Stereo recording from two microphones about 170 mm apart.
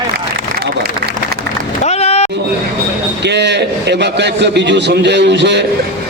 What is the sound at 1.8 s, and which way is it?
Run, 40° left (ahead or behind).